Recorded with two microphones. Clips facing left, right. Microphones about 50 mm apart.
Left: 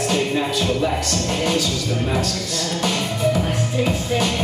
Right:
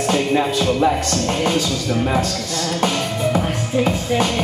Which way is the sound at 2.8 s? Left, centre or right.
Right.